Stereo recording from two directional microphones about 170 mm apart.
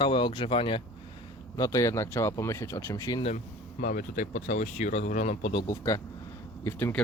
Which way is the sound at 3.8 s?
55° left (ahead or behind).